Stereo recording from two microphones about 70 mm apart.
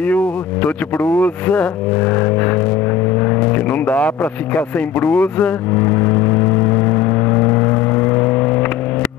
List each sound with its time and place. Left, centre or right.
0.0 s speech: left
3.2 s vehicle: left